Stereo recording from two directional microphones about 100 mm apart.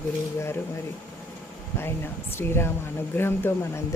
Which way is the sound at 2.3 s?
25° left (ahead or behind).